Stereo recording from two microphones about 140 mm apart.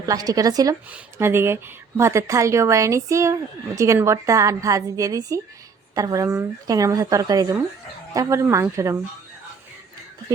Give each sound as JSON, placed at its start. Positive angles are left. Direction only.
{"t": 0.0, "sound": "a woman's voice", "side_deg": -25}
{"t": 0.9, "sound": "a woman's voice", "side_deg": -15}